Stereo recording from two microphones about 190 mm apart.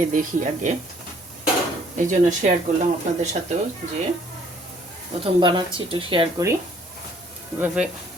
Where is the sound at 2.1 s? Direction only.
40° right (ahead or behind).